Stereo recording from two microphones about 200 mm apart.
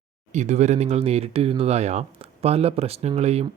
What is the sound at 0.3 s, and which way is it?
Speech, 35° right (ahead or behind).